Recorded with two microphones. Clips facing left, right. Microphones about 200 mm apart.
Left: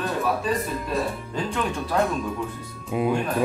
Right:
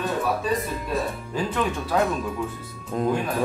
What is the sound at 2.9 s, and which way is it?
Speech, 10° left (ahead or behind).